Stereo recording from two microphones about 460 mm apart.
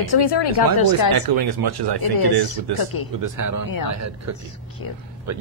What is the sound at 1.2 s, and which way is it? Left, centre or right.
Speech, right.